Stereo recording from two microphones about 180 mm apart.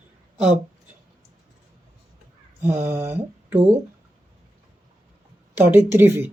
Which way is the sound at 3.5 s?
35° right (ahead or behind).